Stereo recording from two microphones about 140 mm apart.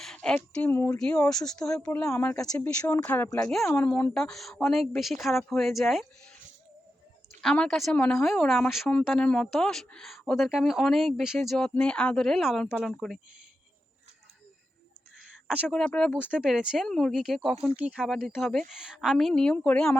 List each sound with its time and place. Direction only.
0.0 s a sound: 5° left (ahead or behind)
0.5 s speech: 15° left (ahead or behind)
0.9 s speech: 5° left (ahead or behind)
3.2 s speech: 25° left (ahead or behind)
3.8 s speech: 10° left (ahead or behind)
7.4 s speech: 5° left (ahead or behind)
15.2 s a sound: 5° right (ahead or behind)
15.7 s speech: 5° left (ahead or behind)
16.3 s speech: 5° right (ahead or behind)